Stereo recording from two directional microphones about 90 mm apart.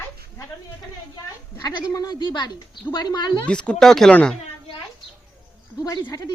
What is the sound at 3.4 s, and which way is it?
Speech, 10° left (ahead or behind).